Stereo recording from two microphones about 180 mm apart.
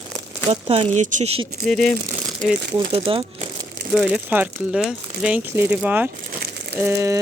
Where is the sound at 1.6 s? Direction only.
5° left (ahead or behind).